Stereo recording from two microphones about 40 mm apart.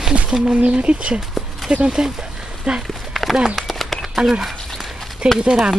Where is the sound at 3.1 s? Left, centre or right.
Centre.